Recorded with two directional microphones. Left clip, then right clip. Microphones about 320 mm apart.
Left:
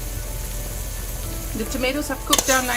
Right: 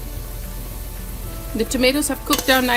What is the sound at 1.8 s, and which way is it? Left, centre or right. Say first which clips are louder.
Speech: right 5 dB; right.